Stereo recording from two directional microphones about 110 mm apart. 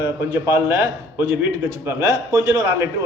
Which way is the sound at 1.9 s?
25° right (ahead or behind).